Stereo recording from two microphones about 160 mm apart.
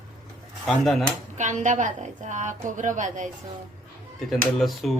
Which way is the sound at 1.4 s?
50° right (ahead or behind).